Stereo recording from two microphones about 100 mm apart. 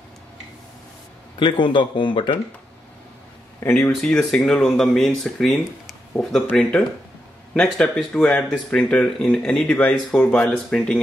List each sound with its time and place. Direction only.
1.4 s speech: 55° left (ahead or behind)
3.9 s speech: 5° left (ahead or behind)
7.5 s speech: 5° left (ahead or behind)